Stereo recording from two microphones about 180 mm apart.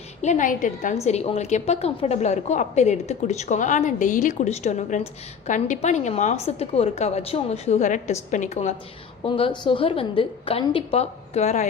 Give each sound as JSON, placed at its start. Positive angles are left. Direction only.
{"t": 0.2, "sound": "a woman's voice", "side_deg": 40}
{"t": 9.2, "sound": "a woman's voice", "side_deg": 30}